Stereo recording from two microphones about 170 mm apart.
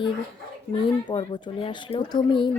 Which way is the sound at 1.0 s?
25° left (ahead or behind).